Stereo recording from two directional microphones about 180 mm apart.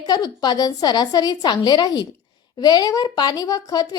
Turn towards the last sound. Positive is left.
turn(degrees=20)  # may be behind; listen again after turning